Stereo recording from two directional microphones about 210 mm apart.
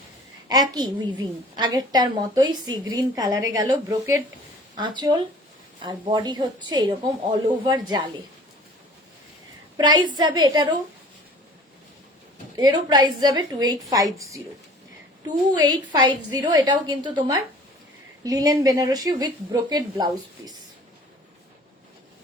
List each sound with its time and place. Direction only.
0.4 s a child's voice: 20° right (ahead or behind)
9.7 s a woman's voice: 20° right (ahead or behind)
12.5 s a woman's voice: 20° right (ahead or behind)
15.5 s a woman's voice: 20° right (ahead or behind)